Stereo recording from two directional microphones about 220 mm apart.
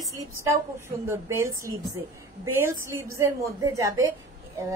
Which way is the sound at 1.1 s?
15° right (ahead or behind).